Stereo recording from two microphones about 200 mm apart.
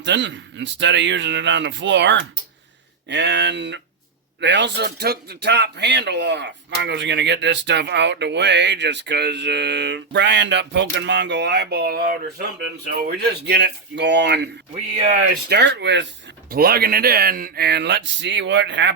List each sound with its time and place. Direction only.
0.0 s a man's voice: 65° right (ahead or behind)
15.4 s a man's voice: 55° right (ahead or behind)
16.5 s speech: 50° right (ahead or behind)